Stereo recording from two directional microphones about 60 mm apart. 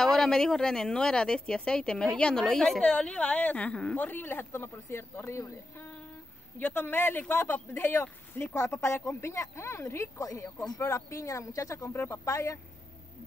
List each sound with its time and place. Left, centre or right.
0.0 s speech: centre
4.0 s speech: left
6.6 s speech: left
11.9 s speech: left
12.3 s speech: left